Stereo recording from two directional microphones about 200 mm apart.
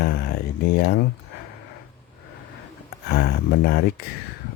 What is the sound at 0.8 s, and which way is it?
Speech, 50° left (ahead or behind).